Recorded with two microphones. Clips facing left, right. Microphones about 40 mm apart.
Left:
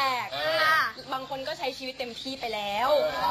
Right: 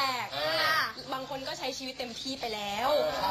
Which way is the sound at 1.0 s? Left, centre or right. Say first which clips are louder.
Left 3 dB; centre.